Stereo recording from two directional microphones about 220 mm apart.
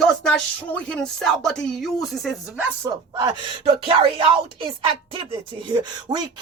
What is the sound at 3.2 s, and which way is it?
Speech, 25° right (ahead or behind).